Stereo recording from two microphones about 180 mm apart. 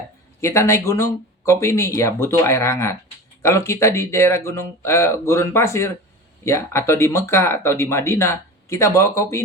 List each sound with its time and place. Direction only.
0.4 s speech: 15° left (ahead or behind)